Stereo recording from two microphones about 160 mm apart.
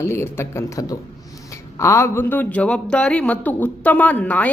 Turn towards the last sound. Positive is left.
turn(degrees=10)  # may be behind; listen again after turning